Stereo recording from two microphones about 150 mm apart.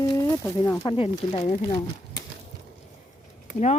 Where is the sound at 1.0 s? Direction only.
40° left (ahead or behind).